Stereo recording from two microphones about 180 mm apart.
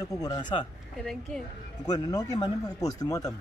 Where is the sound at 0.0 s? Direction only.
20° left (ahead or behind).